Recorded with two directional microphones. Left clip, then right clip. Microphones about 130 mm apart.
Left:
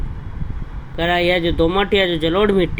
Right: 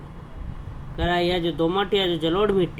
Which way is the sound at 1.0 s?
45° left (ahead or behind).